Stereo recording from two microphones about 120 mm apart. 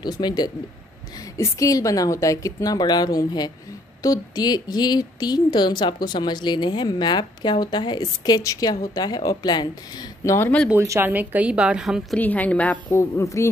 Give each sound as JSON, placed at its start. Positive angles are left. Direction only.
{"t": 0.0, "sound": "a woman's voice", "side_deg": 35}
{"t": 10.7, "sound": "a woman's voice", "side_deg": -20}
{"t": 12.2, "sound": "a woman's voice", "side_deg": 15}
{"t": 12.9, "sound": "a woman's voice", "side_deg": 25}